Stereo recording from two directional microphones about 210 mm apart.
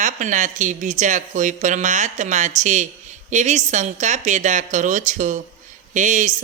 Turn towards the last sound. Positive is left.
turn(degrees=-35)  # may be behind; listen again after turning